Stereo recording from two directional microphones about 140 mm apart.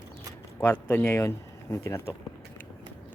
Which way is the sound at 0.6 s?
15° left (ahead or behind).